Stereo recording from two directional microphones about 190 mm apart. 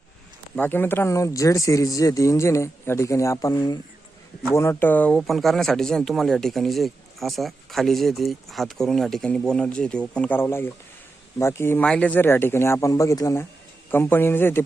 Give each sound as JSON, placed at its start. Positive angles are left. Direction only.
{"t": 0.5, "sound": "speech", "side_deg": 10}